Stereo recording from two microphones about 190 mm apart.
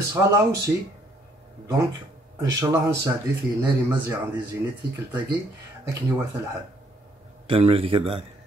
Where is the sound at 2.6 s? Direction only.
15° right (ahead or behind).